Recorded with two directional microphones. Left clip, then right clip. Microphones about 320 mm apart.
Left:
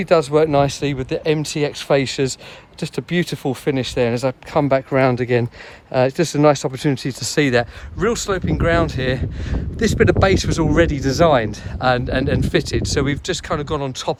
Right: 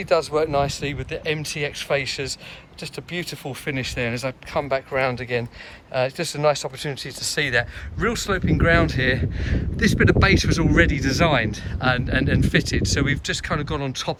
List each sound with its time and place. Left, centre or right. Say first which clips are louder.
0.0 s speech: left 5 dB; left; by 14.2 s centre